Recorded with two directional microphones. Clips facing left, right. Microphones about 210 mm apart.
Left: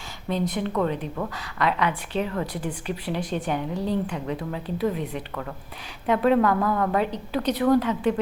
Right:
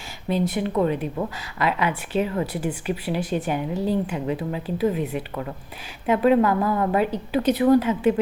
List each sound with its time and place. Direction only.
0.3 s speech: 5° right (ahead or behind)
1.5 s speech: 5° right (ahead or behind)